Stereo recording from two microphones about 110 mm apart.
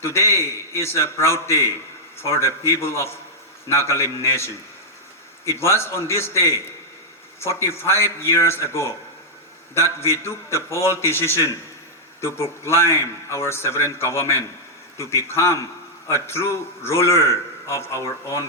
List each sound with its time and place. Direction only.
0.0 s a man's voice: 25° left (ahead or behind)